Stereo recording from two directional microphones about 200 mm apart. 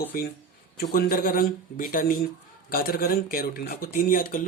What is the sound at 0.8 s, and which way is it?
Speech, 45° left (ahead or behind).